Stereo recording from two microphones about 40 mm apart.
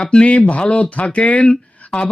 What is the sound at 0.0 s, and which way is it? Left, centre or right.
Speech, left.